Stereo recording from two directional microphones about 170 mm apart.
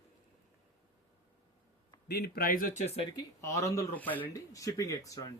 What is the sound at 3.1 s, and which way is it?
Speech, 20° left (ahead or behind).